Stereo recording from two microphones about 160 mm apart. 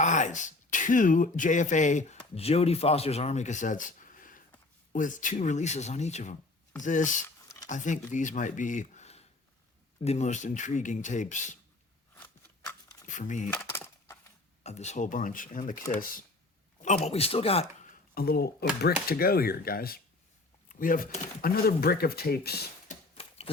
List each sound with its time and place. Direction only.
0.0 s speech: 50° left (ahead or behind)
2.3 s speech: 40° left (ahead or behind)
7.4 s a sound: 20° left (ahead or behind)
7.7 s speech: 50° left (ahead or behind)
12.1 s scissors: 15° left (ahead or behind)
13.1 s speech: 50° left (ahead or behind)
13.5 s coin: 15° left (ahead or behind)
14.6 s speech: 45° left (ahead or behind); by 16.2 s 60° left (ahead or behind)
16.8 s speech: 45° left (ahead or behind)
18.1 s speech: 70° left (ahead or behind)
20.7 s speech: 60° left (ahead or behind); by 22.6 s 75° left (ahead or behind)